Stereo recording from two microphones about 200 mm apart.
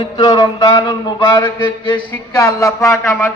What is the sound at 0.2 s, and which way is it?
Mantra, 15° left (ahead or behind).